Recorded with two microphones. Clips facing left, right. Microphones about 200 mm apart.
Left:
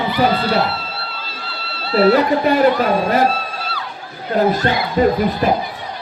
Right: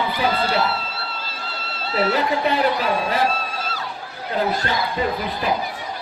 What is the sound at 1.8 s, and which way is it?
Speech, 35° left (ahead or behind).